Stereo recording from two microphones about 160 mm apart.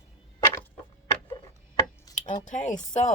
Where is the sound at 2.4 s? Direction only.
50° left (ahead or behind).